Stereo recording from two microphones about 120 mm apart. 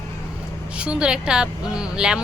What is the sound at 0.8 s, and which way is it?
Speech, 10° right (ahead or behind).